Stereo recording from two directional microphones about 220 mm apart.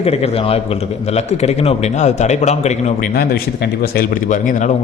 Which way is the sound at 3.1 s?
45° left (ahead or behind).